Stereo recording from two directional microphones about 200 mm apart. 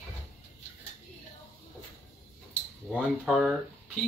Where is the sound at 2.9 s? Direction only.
5° right (ahead or behind).